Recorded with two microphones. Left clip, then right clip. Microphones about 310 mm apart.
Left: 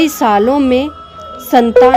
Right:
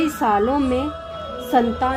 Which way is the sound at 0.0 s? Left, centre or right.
Left.